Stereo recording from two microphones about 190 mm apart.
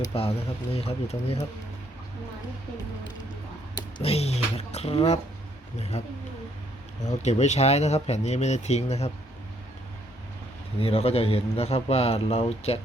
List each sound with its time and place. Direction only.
0.0 s a man's voice: 30° left (ahead or behind)
3.8 s a man's voice: 25° left (ahead or behind)
7.2 s a man's voice: 35° left (ahead or behind)
10.8 s a man's voice: 30° left (ahead or behind)